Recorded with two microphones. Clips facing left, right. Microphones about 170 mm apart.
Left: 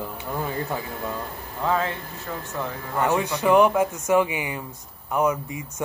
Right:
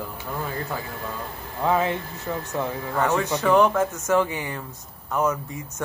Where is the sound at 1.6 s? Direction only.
15° right (ahead or behind).